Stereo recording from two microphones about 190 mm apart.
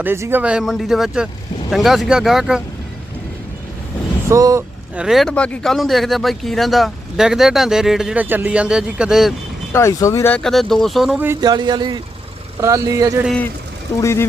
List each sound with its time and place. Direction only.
0.0 s speech: 10° right (ahead or behind)
4.3 s speech: 15° right (ahead or behind)
4.9 s speech: centre (ahead or behind)
9.7 s speech: 15° left (ahead or behind); by 11.3 s centre (ahead or behind)
11.3 s speech: 20° right (ahead or behind)
13.2 s speech: 5° left (ahead or behind)